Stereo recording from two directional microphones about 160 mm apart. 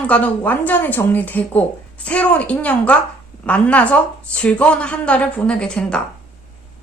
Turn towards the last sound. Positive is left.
turn(degrees=5)  # may be behind; listen again after turning